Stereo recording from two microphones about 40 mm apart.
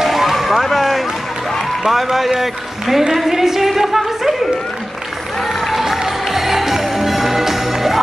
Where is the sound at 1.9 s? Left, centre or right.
Centre.